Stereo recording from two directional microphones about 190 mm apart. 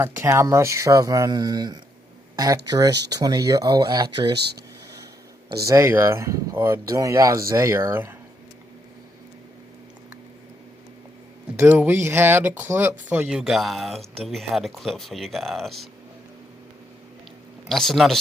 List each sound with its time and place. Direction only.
0.0 s speech: 15° right (ahead or behind)
4.4 s speech: 60° right (ahead or behind)
5.6 s speech: 15° right (ahead or behind)
11.6 s speech: 10° right (ahead or behind)
17.7 s speech: centre (ahead or behind)